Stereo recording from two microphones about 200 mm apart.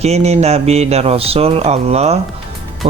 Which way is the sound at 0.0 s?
30° right (ahead or behind).